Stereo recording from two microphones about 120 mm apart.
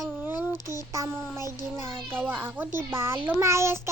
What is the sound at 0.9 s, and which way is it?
Child singing, 25° right (ahead or behind).